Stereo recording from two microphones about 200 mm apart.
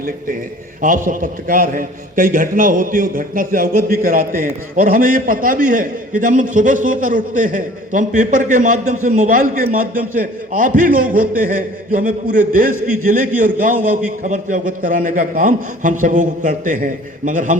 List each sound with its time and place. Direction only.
0.8 s a man's voice: 40° right (ahead or behind)